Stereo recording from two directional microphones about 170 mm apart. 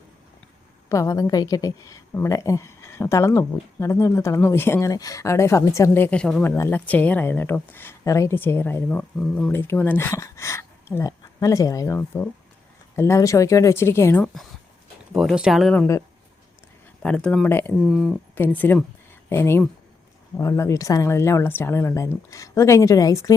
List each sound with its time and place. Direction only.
0.9 s a woman's voice: 20° left (ahead or behind)
15.1 s speech: centre (ahead or behind)
17.0 s a woman's voice: 5° left (ahead or behind)
17.8 s speech: centre (ahead or behind)
18.3 s a woman's voice: 10° left (ahead or behind)